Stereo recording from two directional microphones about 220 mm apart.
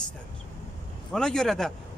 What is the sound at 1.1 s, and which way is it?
Speech, 5° left (ahead or behind).